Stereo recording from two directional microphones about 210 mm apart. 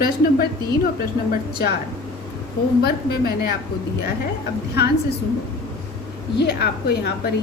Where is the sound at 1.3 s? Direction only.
45° left (ahead or behind).